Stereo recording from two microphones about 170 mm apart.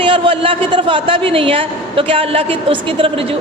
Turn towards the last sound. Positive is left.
turn(degrees=-35)  # may be behind; listen again after turning